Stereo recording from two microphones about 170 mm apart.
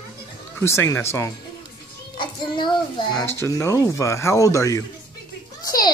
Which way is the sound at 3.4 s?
20° left (ahead or behind).